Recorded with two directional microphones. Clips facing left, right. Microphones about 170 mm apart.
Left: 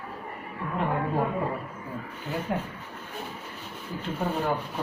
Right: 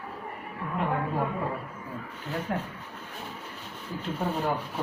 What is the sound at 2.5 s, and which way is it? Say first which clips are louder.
Speech: left 1 dB; 15° left (ahead or behind).